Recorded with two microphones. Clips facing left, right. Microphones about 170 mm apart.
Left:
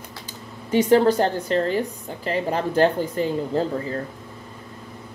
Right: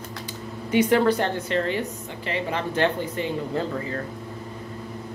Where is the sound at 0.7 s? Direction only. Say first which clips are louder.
Left 3 dB; 35° left (ahead or behind).